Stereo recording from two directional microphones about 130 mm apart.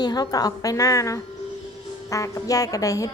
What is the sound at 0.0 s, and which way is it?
A woman's voice, 30° left (ahead or behind).